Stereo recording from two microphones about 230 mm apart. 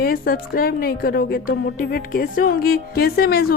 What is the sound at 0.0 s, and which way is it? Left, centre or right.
A woman's voice, left.